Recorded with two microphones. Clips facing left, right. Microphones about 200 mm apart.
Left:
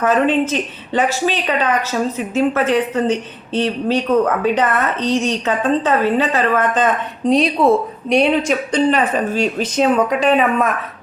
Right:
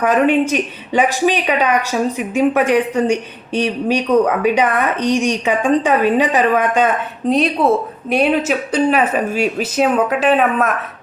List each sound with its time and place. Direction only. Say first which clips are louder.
0.0 s speech: right 1 dB; 15° right (ahead or behind)